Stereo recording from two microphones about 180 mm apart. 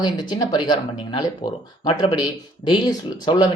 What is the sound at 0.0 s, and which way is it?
Speech, 25° left (ahead or behind).